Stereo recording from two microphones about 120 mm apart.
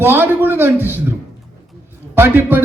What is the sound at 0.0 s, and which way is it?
A man's voice, 15° right (ahead or behind).